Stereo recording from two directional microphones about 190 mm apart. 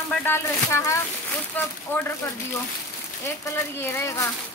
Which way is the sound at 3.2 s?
15° left (ahead or behind).